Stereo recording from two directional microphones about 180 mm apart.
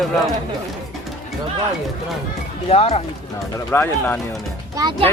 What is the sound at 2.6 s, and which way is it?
Speech, 35° left (ahead or behind).